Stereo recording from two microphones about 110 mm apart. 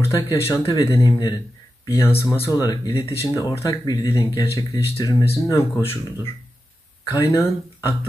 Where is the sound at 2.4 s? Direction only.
35° left (ahead or behind).